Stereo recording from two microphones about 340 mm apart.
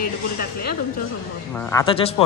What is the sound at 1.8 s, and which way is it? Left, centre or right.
Speech, centre.